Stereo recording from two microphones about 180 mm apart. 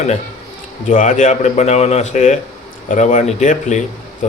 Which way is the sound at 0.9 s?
45° left (ahead or behind).